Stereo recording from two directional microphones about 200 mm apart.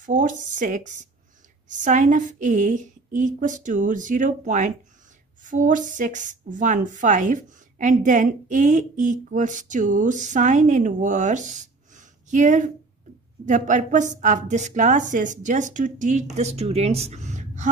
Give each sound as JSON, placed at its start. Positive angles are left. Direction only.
{"t": 0.0, "sound": "a woman's voice", "side_deg": -40}